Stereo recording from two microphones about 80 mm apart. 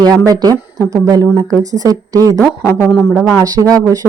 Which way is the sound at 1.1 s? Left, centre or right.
Right.